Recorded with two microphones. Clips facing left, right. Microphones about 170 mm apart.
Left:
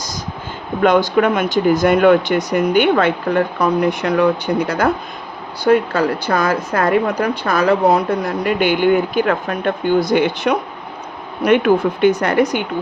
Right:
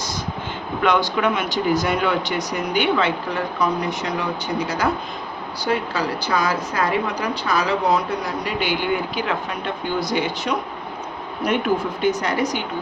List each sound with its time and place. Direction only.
0.8 s a woman's voice: 45° left (ahead or behind)
11.4 s speech: 70° left (ahead or behind)